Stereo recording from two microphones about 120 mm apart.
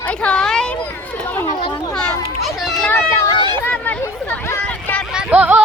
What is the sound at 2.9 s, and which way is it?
Speech, 20° left (ahead or behind).